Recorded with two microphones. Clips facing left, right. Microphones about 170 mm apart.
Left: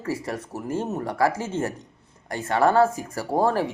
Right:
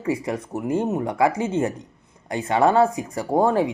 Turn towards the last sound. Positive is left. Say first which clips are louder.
# right 3 dB
turn(degrees=-20)  # may be behind; listen again after turning